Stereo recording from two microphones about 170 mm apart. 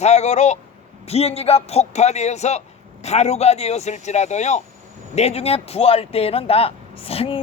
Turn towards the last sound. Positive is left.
turn(degrees=35)  # may be behind; listen again after turning